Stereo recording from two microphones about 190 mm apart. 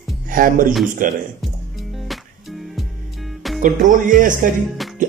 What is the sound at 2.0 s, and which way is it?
Music, centre (ahead or behind).